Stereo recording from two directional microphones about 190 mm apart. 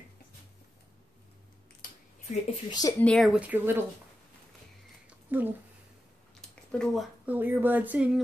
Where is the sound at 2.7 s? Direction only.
20° left (ahead or behind).